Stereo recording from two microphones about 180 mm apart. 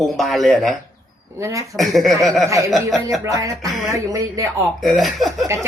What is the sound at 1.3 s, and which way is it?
Speech, 15° right (ahead or behind).